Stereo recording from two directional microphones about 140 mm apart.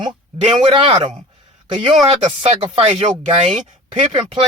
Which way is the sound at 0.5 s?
40° right (ahead or behind).